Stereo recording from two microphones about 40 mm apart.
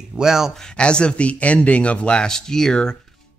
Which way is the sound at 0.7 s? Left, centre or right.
Left.